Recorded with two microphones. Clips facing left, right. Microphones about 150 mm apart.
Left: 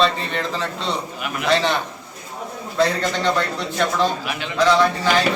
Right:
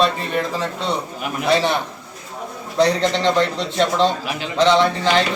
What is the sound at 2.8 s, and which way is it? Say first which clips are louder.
A man's voice: right 3 dB; 20° right (ahead or behind).